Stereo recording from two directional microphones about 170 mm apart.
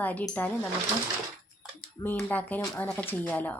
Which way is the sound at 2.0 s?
10° left (ahead or behind).